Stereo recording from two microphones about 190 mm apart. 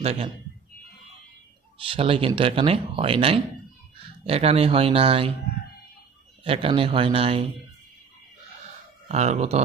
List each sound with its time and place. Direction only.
0.0 s a man's voice: 35° right (ahead or behind)
1.9 s speech: 30° right (ahead or behind)
6.4 s speech: 30° right (ahead or behind)
9.0 s speech: 35° right (ahead or behind)